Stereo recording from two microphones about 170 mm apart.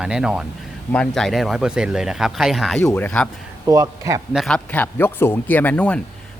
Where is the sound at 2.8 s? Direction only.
10° left (ahead or behind).